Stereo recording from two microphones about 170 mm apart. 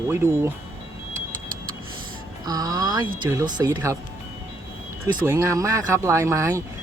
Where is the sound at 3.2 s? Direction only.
15° right (ahead or behind).